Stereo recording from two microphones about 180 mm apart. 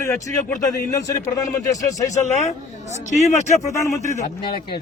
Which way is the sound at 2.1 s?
40° left (ahead or behind).